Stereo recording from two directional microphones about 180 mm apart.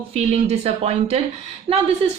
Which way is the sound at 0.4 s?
35° right (ahead or behind).